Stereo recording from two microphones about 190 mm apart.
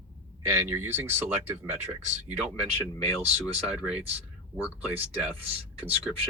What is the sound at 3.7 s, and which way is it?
Speech, 5° right (ahead or behind).